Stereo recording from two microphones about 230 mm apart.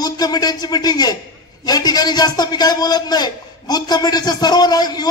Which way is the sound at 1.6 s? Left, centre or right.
Centre.